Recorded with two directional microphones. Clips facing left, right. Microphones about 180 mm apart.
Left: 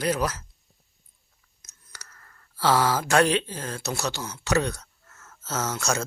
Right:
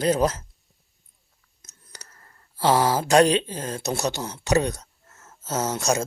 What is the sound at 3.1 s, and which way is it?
Speech, 20° right (ahead or behind).